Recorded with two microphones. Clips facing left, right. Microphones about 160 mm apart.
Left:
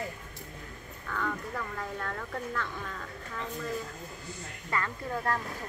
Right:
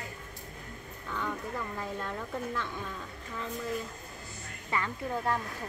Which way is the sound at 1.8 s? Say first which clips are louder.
Even; 15° right (ahead or behind).